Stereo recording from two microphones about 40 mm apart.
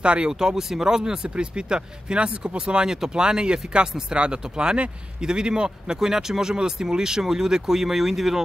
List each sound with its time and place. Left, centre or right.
0.0 s speech: right
0.3 s speech: centre